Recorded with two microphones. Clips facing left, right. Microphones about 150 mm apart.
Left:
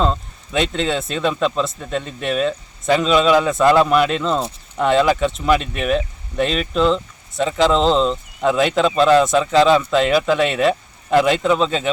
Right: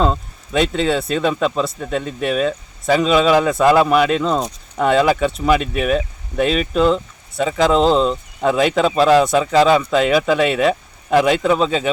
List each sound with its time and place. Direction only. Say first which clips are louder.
0.0 s speech: right 2 dB; 5° right (ahead or behind)